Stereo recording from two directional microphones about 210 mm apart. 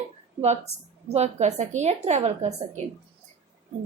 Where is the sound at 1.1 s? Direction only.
30° right (ahead or behind).